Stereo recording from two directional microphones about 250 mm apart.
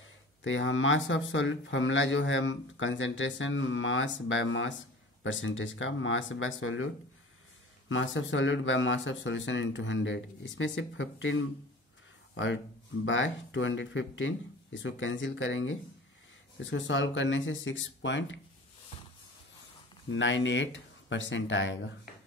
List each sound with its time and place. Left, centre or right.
0.0 s speech: left
7.9 s speech: left
13.0 s speech: left
20.1 s speech: left